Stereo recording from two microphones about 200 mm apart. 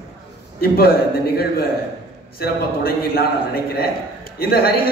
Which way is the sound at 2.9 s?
50° left (ahead or behind).